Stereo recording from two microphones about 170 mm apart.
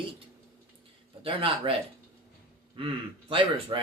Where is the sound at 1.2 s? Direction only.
30° right (ahead or behind).